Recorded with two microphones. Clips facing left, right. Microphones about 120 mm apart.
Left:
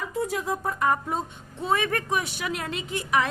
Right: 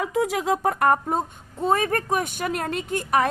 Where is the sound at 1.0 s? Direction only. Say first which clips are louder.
Right 4 dB; 45° right (ahead or behind).